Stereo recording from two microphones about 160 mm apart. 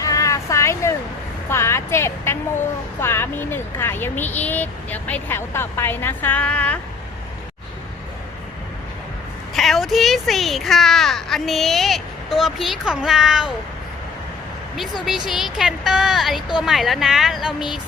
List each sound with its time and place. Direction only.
0.0 s a sound: 20° left (ahead or behind)
1.5 s speech: 15° left (ahead or behind)
9.6 s speech: centre (ahead or behind)
15.0 s speech: centre (ahead or behind)